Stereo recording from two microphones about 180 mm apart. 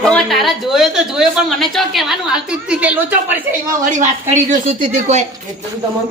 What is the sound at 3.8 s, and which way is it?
A woman's voice, 45° right (ahead or behind).